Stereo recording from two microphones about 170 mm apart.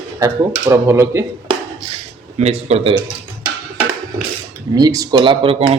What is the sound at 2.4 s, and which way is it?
Speech, 40° right (ahead or behind).